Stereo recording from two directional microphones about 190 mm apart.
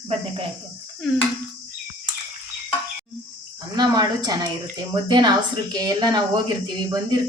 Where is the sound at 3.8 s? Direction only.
20° right (ahead or behind).